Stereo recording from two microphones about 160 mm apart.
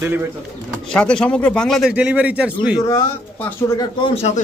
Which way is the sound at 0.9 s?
5° left (ahead or behind).